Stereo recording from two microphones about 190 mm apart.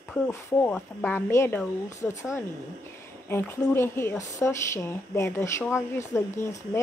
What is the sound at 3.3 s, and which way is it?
Speech, 10° left (ahead or behind).